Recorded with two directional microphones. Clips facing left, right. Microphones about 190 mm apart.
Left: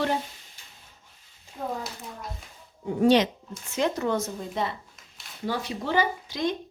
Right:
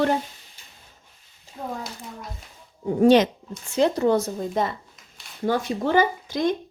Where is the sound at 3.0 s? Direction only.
50° right (ahead or behind).